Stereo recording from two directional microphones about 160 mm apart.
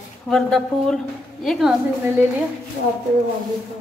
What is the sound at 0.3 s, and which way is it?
Speech, 5° left (ahead or behind).